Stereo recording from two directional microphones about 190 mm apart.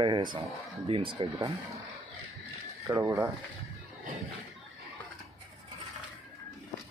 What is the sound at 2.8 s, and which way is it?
Speech, 15° right (ahead or behind).